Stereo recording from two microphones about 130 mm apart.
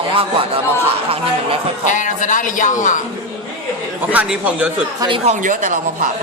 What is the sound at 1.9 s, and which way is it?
Speech, 70° left (ahead or behind).